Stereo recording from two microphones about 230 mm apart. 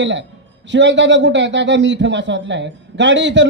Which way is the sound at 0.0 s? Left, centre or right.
Right.